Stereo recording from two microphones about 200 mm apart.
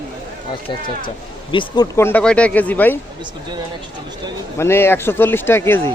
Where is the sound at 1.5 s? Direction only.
20° left (ahead or behind).